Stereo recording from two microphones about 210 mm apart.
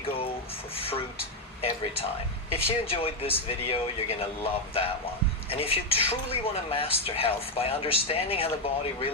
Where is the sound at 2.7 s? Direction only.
25° left (ahead or behind).